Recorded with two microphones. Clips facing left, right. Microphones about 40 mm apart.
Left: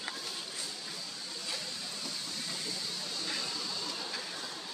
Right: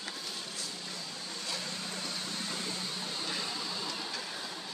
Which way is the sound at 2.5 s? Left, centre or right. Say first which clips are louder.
Right 2 dB; right.